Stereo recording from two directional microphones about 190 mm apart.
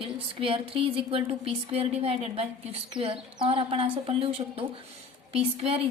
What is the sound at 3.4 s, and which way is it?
A woman's voice, 30° right (ahead or behind).